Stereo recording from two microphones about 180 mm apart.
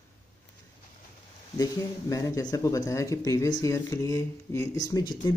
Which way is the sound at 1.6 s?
20° left (ahead or behind).